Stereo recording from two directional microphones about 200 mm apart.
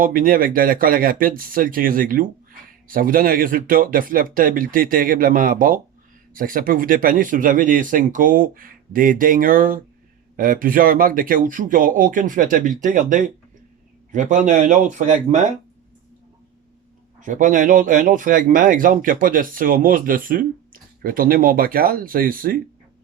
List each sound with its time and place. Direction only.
0.0 s speech: 45° right (ahead or behind)
17.2 s speech: 40° right (ahead or behind)